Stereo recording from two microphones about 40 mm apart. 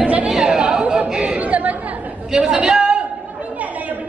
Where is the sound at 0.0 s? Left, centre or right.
Right.